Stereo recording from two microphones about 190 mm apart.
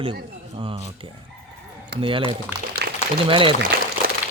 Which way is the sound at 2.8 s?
60° right (ahead or behind).